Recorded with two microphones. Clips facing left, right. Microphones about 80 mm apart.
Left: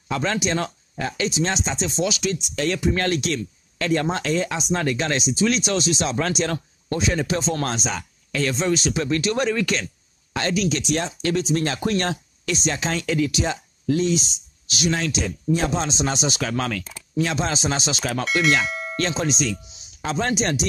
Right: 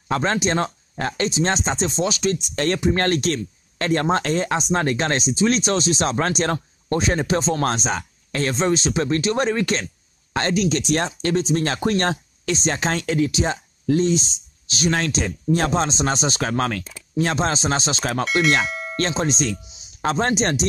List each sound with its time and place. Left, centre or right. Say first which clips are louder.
0.1 s speech: right 3 dB; right
14.9 s speech: right 2 dB; right
18.7 s bell: even; centre
18.9 s speech: right 2 dB; right